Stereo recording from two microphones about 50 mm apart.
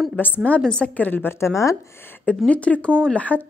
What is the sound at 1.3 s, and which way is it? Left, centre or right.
Speech, left.